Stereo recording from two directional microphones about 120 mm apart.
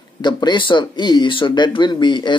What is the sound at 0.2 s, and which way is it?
Speech, 40° left (ahead or behind).